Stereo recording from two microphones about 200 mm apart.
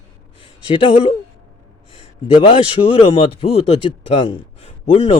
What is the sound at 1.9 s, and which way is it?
A man's voice, 25° left (ahead or behind).